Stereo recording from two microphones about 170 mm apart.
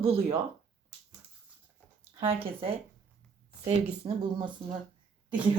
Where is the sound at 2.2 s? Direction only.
35° right (ahead or behind).